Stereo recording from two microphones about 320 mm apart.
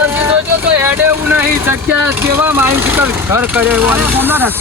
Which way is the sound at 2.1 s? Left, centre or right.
Centre.